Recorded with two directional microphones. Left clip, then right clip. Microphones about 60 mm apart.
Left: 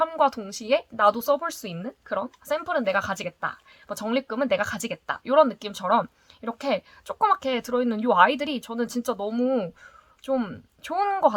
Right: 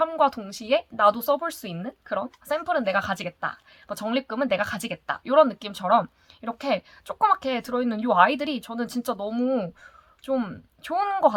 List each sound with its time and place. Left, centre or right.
0.0 s a sound: left
0.4 s speech: left
2.0 s speech: left